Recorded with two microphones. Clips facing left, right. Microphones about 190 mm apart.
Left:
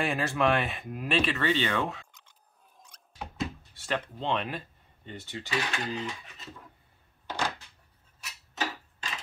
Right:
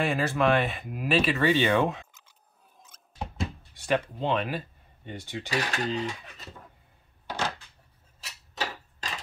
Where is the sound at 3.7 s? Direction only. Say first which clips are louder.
Right 6 dB; 15° right (ahead or behind).